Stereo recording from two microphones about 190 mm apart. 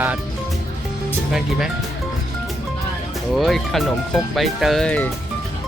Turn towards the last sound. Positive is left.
turn(degrees=5)  # may be behind; listen again after turning